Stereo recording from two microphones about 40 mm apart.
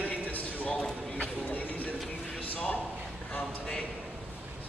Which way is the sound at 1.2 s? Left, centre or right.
Left.